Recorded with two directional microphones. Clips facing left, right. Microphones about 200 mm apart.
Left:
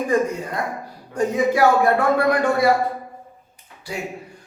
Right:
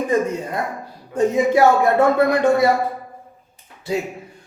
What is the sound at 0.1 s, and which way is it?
A man's voice, 25° right (ahead or behind).